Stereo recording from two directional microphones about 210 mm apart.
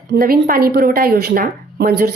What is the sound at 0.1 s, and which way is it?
Speech, 45° right (ahead or behind).